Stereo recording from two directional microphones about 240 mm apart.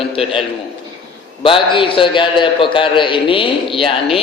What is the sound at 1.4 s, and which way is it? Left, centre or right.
A man's voice, left.